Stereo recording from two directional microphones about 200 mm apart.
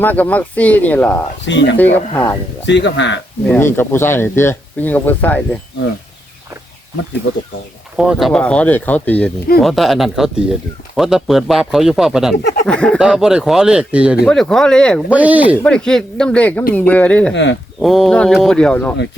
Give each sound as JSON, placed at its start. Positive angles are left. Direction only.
{"t": 0.0, "sound": "speech", "side_deg": 10}
{"t": 1.5, "sound": "speech", "side_deg": 60}
{"t": 1.7, "sound": "speech", "side_deg": 10}
{"t": 2.6, "sound": "speech", "side_deg": 60}
{"t": 3.4, "sound": "speech", "side_deg": 10}
{"t": 7.9, "sound": "speech", "side_deg": 0}
{"t": 15.1, "sound": "speech", "side_deg": -5}
{"t": 15.5, "sound": "speech", "side_deg": 5}
{"t": 17.3, "sound": "speech", "side_deg": 65}
{"t": 17.7, "sound": "speech", "side_deg": 0}